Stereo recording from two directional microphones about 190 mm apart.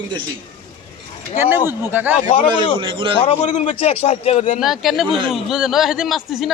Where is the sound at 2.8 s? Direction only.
25° right (ahead or behind).